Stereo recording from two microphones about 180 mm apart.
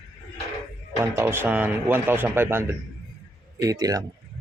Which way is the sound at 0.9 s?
15° right (ahead or behind).